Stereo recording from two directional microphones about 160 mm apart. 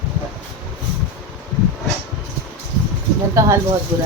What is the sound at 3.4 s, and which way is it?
Speech, 20° right (ahead or behind).